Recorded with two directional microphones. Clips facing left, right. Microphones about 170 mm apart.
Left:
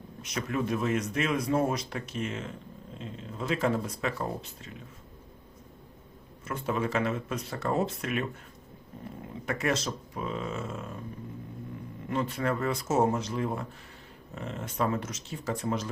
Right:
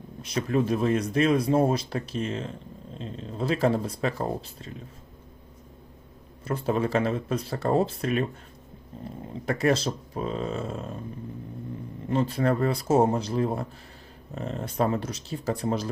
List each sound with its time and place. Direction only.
0.2 s speech: 30° right (ahead or behind)
6.4 s speech: 35° right (ahead or behind)
9.5 s speech: 35° right (ahead or behind)
12.0 s speech: 30° right (ahead or behind)